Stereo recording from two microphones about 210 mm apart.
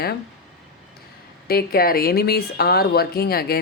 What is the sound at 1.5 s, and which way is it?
Speech, 45° left (ahead or behind).